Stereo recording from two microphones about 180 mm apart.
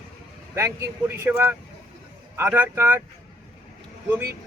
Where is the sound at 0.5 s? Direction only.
15° right (ahead or behind).